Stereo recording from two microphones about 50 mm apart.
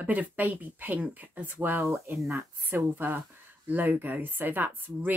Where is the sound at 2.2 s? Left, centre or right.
Right.